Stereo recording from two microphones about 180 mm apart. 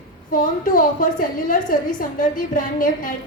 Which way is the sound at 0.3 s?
50° left (ahead or behind).